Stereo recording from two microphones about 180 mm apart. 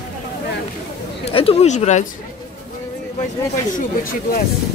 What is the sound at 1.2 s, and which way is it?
Speech, 30° left (ahead or behind).